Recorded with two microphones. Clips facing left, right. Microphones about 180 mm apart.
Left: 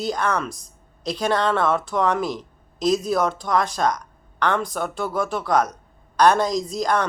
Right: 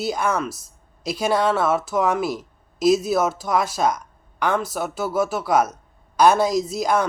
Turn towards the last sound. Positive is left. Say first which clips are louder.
# right 2 dB
turn(degrees=-5)  # may be behind; listen again after turning